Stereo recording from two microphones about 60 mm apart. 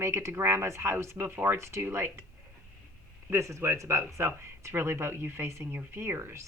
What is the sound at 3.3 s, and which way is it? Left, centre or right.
A woman's voice, right.